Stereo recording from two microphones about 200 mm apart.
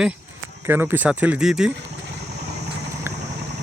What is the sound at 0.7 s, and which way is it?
Speech, 10° right (ahead or behind).